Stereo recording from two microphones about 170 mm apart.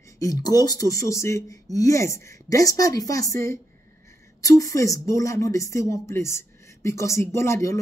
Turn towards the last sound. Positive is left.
turn(degrees=15)  # may be behind; listen again after turning